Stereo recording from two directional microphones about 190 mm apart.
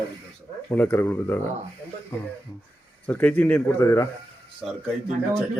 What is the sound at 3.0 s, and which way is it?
Speech, 10° left (ahead or behind).